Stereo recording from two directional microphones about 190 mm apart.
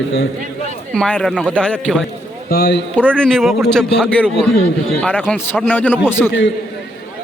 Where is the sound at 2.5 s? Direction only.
55° left (ahead or behind).